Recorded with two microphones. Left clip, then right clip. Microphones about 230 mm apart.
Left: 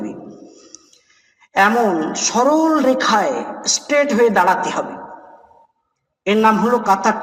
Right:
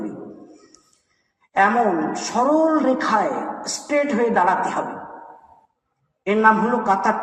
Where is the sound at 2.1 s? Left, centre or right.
Left.